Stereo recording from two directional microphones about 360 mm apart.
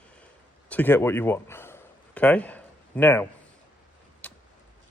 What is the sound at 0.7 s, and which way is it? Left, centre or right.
Speech, centre.